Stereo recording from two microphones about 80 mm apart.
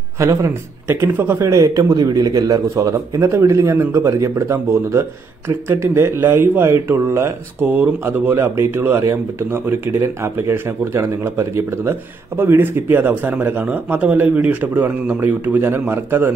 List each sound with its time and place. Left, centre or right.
0.2 s speech: right
7.6 s speech: right